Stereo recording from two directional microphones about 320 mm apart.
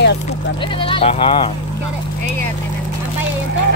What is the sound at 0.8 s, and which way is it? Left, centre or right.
Speech, centre.